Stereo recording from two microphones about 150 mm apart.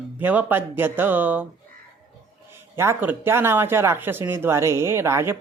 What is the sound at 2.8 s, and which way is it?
Speech, 15° right (ahead or behind).